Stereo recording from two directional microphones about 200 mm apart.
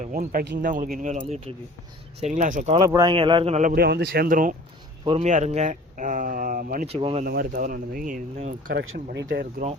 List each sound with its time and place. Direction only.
0.0 s speech: 40° right (ahead or behind)
2.7 s speech: 20° right (ahead or behind); by 4.5 s 45° right (ahead or behind)
5.0 s speech: 35° right (ahead or behind)
6.8 s speech: 30° right (ahead or behind)
7.3 s speech: 45° right (ahead or behind)
8.7 s speech: 80° right
9.1 s speech: 50° right (ahead or behind)